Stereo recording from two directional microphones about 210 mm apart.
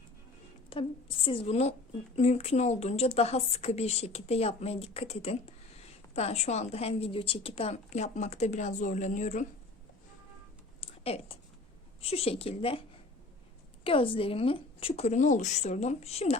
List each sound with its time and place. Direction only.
0.7 s a woman's voice: 25° left (ahead or behind)
10.8 s a sound: 25° left (ahead or behind)
12.0 s speech: 30° left (ahead or behind)
13.8 s speech: 25° left (ahead or behind)